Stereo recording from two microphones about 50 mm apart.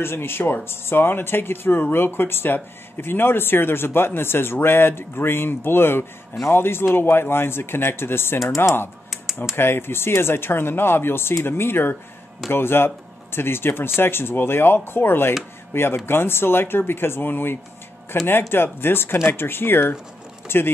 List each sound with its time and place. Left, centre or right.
0.0 s speech: left
9.1 s typing: centre
9.6 s speech: left